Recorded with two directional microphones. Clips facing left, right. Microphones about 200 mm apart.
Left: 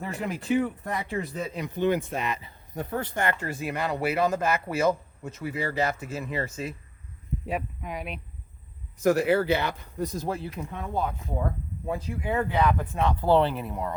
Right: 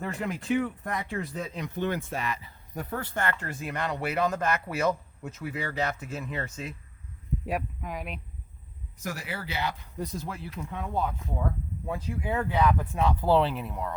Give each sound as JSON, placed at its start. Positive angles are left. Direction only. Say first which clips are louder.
{"t": 0.0, "sound": "speech", "louder": "left 1 dB", "side_deg": 5}
{"t": 9.0, "sound": "speech", "louder": "left 15 dB", "side_deg": 55}
{"t": 10.8, "sound": "speech", "louder": "even", "side_deg": 10}